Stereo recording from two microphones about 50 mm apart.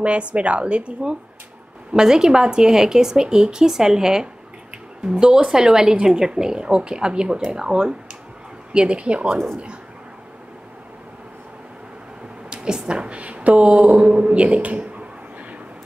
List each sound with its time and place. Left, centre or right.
0.0 s a woman's voice: right
1.9 s a woman's voice: centre
12.5 s a woman's voice: centre